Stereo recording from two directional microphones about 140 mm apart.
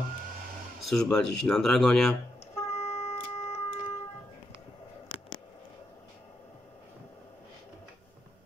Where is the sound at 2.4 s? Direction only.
50° left (ahead or behind).